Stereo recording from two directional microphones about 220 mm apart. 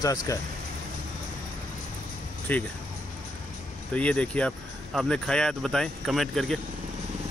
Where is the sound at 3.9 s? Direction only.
5° left (ahead or behind).